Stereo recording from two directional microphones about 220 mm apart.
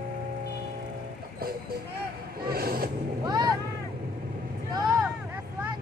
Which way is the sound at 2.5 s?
45° right (ahead or behind).